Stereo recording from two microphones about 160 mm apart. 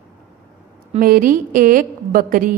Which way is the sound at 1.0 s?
60° right (ahead or behind).